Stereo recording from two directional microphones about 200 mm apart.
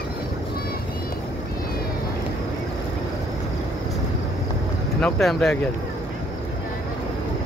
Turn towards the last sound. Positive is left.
turn(degrees=0)  # may be behind; listen again after turning